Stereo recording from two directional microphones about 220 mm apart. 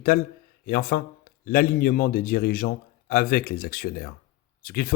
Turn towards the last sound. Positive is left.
turn(degrees=40)  # may be behind; listen again after turning